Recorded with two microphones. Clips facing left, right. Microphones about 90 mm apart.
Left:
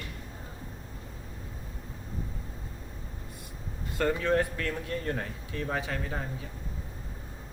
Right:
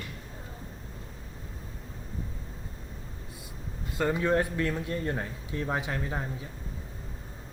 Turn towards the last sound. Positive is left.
turn(degrees=-20)  # may be behind; listen again after turning